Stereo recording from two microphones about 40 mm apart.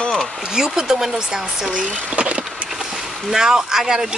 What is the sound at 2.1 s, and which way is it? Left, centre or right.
Vehicle, right.